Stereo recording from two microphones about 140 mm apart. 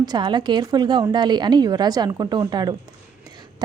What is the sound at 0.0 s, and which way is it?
A woman's voice, 30° right (ahead or behind).